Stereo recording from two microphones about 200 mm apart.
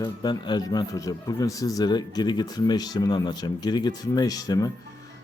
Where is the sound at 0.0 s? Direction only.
20° left (ahead or behind).